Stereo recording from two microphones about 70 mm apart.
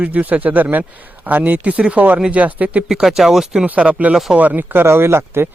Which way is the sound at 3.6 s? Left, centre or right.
Centre.